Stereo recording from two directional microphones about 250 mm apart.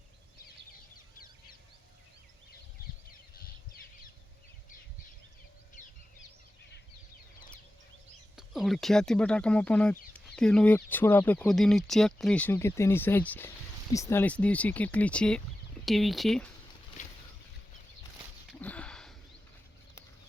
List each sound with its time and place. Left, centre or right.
8.4 s speech: centre
18.6 s sniff: centre